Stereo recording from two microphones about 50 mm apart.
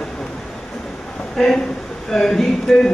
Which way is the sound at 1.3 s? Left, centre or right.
Centre.